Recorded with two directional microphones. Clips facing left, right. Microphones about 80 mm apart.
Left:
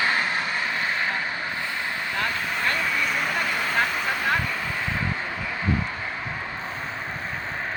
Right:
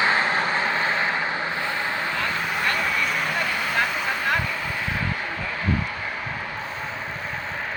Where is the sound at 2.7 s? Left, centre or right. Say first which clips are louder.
Even; centre.